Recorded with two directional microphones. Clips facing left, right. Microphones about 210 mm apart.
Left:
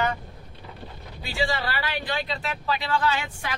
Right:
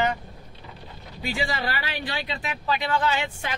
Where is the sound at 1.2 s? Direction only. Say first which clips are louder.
Even; 15° right (ahead or behind).